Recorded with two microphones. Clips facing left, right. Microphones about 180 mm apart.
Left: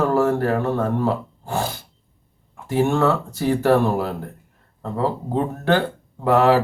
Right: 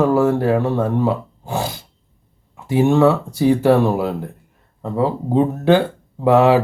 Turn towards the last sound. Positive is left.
turn(degrees=-20)  # may be behind; listen again after turning